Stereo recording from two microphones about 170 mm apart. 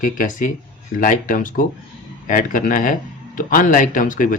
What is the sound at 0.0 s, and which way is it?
Speech, 50° left (ahead or behind).